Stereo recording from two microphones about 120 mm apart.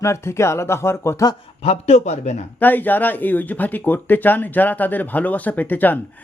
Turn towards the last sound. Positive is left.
turn(degrees=15)  # may be behind; listen again after turning